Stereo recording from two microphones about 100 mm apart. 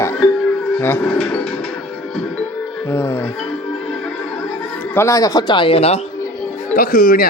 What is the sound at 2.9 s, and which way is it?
Speech, 25° left (ahead or behind).